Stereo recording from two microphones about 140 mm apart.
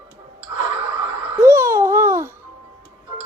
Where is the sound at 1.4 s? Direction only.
20° right (ahead or behind).